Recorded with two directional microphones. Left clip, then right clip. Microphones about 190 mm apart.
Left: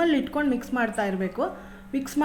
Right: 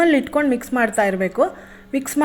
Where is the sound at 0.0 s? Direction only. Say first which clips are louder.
Right 7 dB; 40° right (ahead or behind).